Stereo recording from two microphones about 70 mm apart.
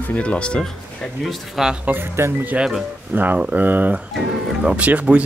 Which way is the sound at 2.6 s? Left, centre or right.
Centre.